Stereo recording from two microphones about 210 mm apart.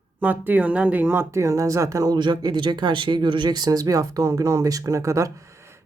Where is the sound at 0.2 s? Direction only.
10° right (ahead or behind).